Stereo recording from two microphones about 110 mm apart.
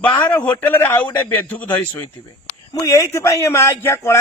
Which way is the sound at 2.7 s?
30° left (ahead or behind).